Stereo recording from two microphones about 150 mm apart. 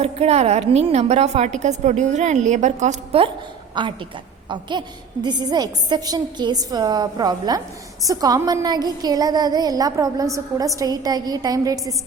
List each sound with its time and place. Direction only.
0.0 s a woman's voice: 45° right (ahead or behind)
3.8 s a woman's voice: 30° right (ahead or behind)